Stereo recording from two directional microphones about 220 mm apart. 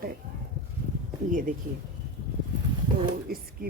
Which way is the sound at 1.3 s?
35° right (ahead or behind).